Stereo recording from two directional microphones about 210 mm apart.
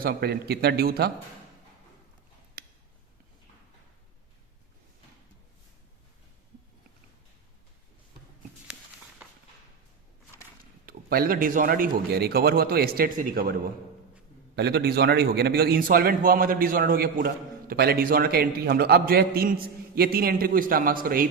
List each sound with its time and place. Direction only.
0.0 s a man's voice: 50° right (ahead or behind)
2.6 s a sound: 45° right (ahead or behind)
10.8 s a man's voice: 45° right (ahead or behind)
14.5 s a man's voice: 50° right (ahead or behind)